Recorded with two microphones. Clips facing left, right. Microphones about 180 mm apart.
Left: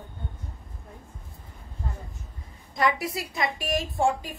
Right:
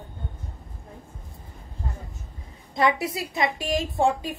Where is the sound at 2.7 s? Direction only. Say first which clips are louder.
Right 3 dB; 25° right (ahead or behind).